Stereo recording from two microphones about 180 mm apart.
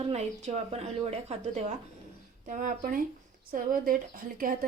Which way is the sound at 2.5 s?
45° right (ahead or behind).